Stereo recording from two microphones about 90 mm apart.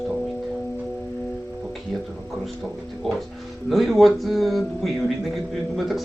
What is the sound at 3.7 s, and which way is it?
Speech, centre (ahead or behind).